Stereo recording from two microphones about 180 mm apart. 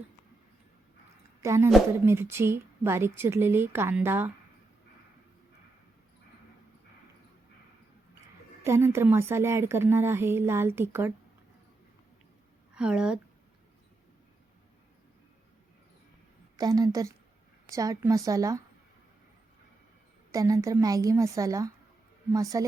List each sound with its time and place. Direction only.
1.5 s a woman's voice: 15° right (ahead or behind)
8.6 s a woman's voice: 15° right (ahead or behind)
12.7 s speech: 5° right (ahead or behind)
16.6 s a woman's voice: 20° right (ahead or behind)
20.3 s a woman's voice: 20° right (ahead or behind)